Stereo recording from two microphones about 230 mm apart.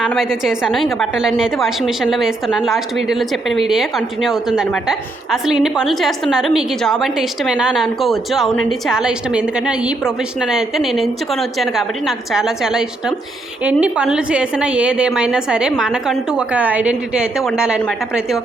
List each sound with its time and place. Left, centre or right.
0.0 s a woman's voice: centre